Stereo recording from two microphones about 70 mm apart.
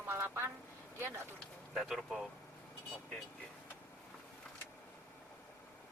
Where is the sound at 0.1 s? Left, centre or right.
Right.